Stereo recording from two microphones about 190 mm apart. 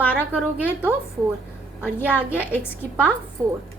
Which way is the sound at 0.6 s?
5° right (ahead or behind).